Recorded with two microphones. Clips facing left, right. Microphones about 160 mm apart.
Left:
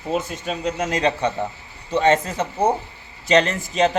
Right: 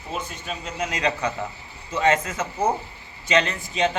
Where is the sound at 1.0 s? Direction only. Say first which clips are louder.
Left 3 dB; 25° left (ahead or behind).